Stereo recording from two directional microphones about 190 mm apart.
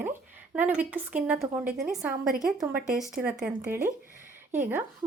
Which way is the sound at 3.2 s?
5° right (ahead or behind).